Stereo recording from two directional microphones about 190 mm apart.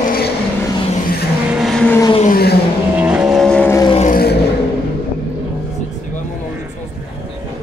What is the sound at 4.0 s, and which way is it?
Vehicle, 45° left (ahead or behind).